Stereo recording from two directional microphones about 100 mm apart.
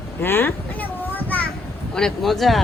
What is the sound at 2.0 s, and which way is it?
Speech, 5° left (ahead or behind).